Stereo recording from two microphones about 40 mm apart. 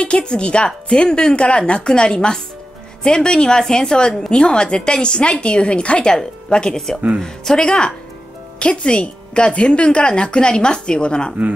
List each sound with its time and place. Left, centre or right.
0.0 s a woman's voice: left
7.6 s a woman's voice: left